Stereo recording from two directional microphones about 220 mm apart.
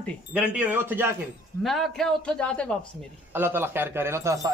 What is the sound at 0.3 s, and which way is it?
A man's voice, 5° right (ahead or behind).